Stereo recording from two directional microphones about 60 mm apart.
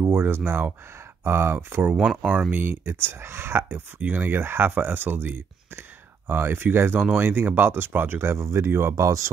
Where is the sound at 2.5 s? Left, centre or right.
Right.